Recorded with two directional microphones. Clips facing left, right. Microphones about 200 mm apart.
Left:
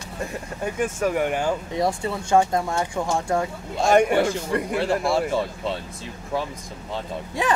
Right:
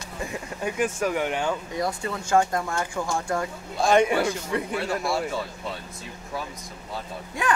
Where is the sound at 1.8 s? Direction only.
25° left (ahead or behind).